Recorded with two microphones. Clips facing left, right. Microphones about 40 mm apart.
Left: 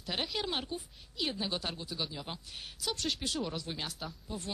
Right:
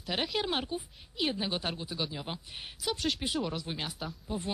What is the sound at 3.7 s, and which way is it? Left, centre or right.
Speech, centre.